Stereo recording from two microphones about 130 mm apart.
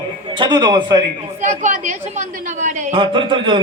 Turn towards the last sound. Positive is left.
turn(degrees=-40)  # may be behind; listen again after turning